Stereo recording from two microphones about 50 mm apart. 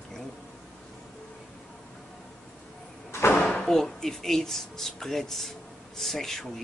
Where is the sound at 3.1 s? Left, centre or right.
Left.